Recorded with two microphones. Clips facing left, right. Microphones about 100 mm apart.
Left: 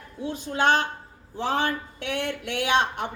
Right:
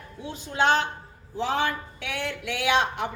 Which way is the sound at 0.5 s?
45° left (ahead or behind).